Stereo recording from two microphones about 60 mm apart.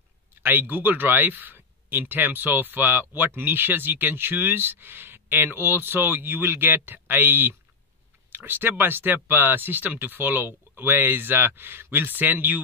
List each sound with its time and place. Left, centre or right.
0.4 s speech: right